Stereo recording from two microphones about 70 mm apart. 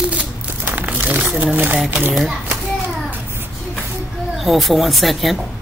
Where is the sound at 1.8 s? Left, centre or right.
Right.